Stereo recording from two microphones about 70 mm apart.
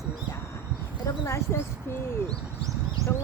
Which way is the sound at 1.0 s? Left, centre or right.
Left.